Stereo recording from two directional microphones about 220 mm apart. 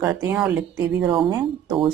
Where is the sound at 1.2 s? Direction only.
20° right (ahead or behind).